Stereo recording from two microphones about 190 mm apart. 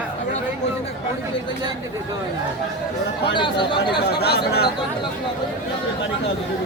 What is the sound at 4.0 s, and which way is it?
Chatter, 60° left (ahead or behind).